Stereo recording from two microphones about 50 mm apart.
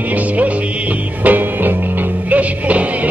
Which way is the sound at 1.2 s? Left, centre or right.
Right.